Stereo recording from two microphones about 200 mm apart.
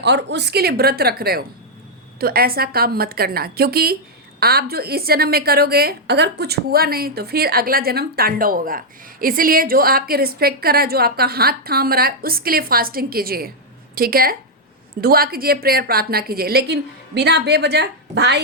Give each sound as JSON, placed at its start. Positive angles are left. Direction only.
{"t": 0.0, "sound": "a woman's voice", "side_deg": -60}